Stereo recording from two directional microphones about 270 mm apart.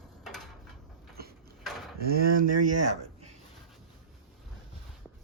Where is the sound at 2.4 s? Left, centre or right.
Right.